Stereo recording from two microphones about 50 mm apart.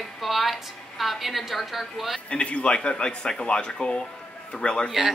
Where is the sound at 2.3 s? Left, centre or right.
Left.